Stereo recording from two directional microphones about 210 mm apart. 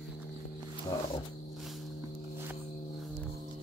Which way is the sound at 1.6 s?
Centre (ahead or behind).